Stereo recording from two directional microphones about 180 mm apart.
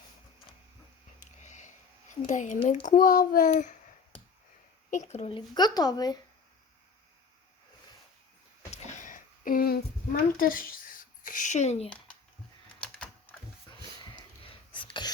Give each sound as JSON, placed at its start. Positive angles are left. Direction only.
{"t": 1.2, "sound": "sniff", "side_deg": 40}
{"t": 2.2, "sound": "a child's voice", "side_deg": 40}
{"t": 4.9, "sound": "speech", "side_deg": 40}
{"t": 5.5, "sound": "speech", "side_deg": 20}
{"t": 8.7, "sound": "a sound", "side_deg": 40}
{"t": 14.2, "sound": "a sound", "side_deg": 30}